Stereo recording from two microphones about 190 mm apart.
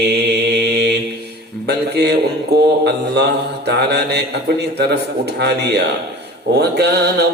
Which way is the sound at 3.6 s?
60° right (ahead or behind).